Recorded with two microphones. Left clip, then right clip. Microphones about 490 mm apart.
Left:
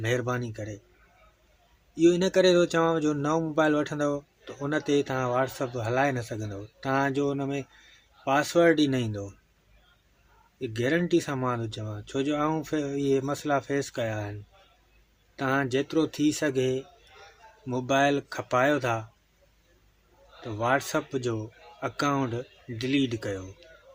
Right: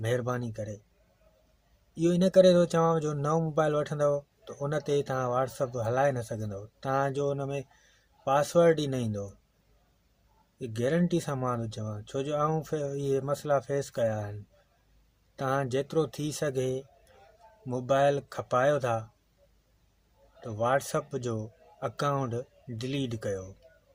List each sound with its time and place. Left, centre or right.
0.0 s speech: right
2.0 s speech: right
10.6 s speech: right
15.4 s speech: right
20.6 s speech: right